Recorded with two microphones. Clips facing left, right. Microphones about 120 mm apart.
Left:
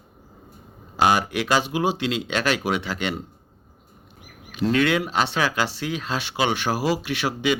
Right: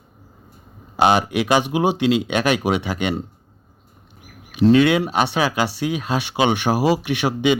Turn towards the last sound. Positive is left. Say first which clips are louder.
# right 5 dB
turn(degrees=-20)  # may be behind; listen again after turning